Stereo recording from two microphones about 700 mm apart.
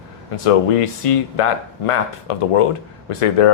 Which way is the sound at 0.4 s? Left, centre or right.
Left.